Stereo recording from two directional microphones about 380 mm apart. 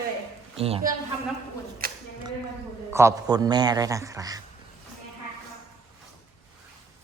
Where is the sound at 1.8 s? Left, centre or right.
Right.